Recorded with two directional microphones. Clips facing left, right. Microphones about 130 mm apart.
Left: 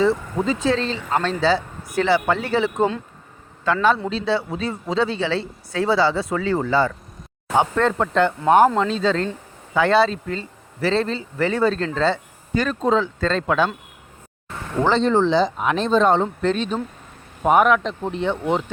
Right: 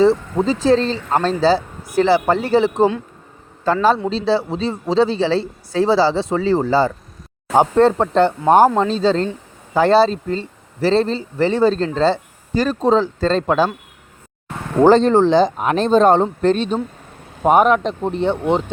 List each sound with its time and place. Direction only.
0.0 s a man's voice: 35° right (ahead or behind)
14.8 s a man's voice: 45° right (ahead or behind)